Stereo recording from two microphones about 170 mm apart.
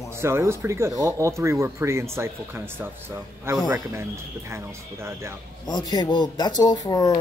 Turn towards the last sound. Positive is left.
turn(degrees=20)  # may be behind; listen again after turning